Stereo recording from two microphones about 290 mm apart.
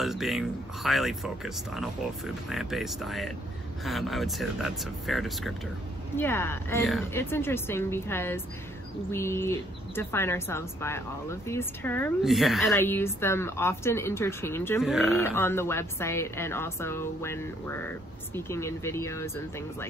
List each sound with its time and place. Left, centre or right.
0.0 s speech: centre